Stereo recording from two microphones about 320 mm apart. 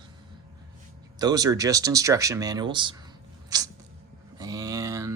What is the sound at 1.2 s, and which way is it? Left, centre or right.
Speech, centre.